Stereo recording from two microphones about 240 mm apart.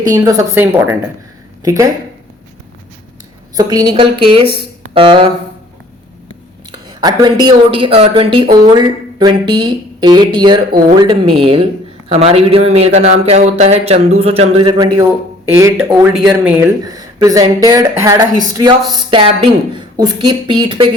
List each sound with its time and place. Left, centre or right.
0.0 s speech: centre
3.5 s a man's voice: centre
6.7 s a woman's voice: centre
10.7 s speech: right
11.0 s a man's voice: right